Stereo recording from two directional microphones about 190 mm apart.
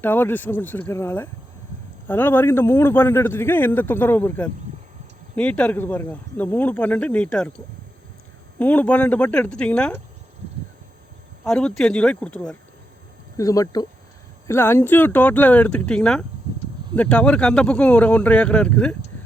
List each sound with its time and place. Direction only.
0.0 s a man's voice: 10° left (ahead or behind)
8.5 s a man's voice: 10° left (ahead or behind)
11.4 s speech: 5° left (ahead or behind)
13.3 s a man's voice: 15° left (ahead or behind)